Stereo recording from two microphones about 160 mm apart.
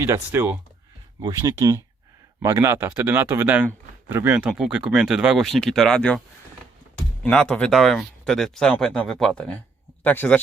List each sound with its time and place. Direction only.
0.0 s speech: 15° right (ahead or behind)
1.2 s a man's voice: 25° right (ahead or behind); by 10.4 s 10° left (ahead or behind)